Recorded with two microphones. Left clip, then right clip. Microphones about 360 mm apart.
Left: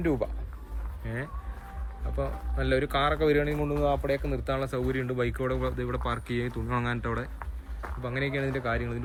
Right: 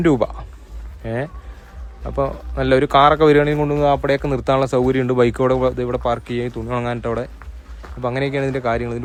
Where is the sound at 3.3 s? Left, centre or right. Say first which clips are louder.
Right 11 dB; right.